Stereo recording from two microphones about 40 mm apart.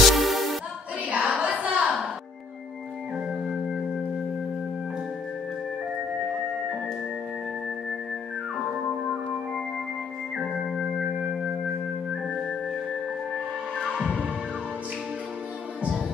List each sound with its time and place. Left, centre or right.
0.1 s music: centre
1.0 s a sound: right
3.4 s singing bowl: centre
6.2 s music: centre
10.3 s music: centre
11.4 s music: right